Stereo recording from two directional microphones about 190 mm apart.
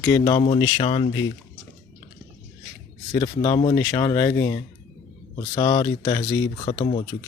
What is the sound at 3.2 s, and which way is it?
Speech, 30° left (ahead or behind).